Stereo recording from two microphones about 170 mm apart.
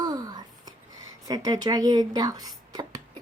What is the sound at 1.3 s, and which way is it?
Speech, 25° right (ahead or behind).